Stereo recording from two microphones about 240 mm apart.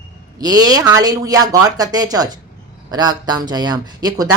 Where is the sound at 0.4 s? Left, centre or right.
Centre.